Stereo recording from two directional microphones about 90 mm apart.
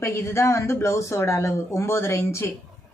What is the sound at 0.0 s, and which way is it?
Speech, 30° left (ahead or behind).